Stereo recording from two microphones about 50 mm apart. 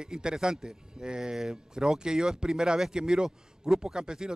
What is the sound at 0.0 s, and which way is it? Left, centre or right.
Speech, centre.